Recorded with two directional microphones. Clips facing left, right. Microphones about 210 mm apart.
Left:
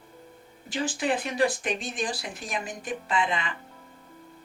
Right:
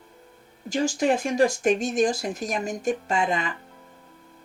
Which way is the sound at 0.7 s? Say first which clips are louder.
Right 5 dB; 40° right (ahead or behind).